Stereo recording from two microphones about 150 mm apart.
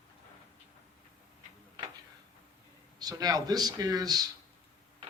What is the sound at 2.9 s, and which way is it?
Speech, 25° right (ahead or behind).